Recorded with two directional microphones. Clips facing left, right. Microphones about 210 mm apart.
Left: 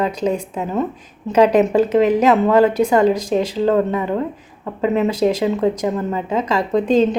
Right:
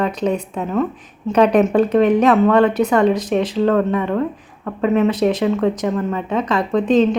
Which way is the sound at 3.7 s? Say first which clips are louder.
Left 2 dB; 25° left (ahead or behind).